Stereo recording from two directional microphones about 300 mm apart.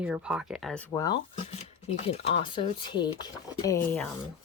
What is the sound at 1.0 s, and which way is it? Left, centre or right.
Speech, centre.